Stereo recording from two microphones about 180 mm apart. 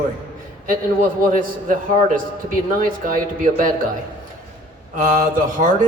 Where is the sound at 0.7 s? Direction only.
50° right (ahead or behind).